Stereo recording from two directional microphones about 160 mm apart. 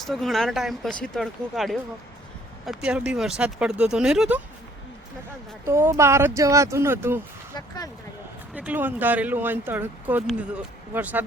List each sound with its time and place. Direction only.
0.0 s speech: centre (ahead or behind)
5.6 s speech: 15° right (ahead or behind)
8.5 s speech: 10° right (ahead or behind)